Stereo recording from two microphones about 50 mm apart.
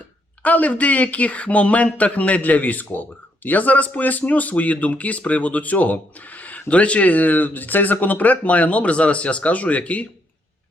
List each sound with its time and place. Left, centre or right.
0.4 s speech: left